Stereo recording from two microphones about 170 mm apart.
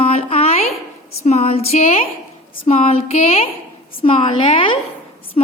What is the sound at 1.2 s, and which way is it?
A woman's voice, 40° left (ahead or behind).